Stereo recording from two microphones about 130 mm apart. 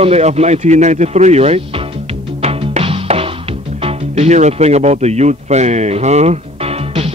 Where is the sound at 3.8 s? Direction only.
55° right (ahead or behind).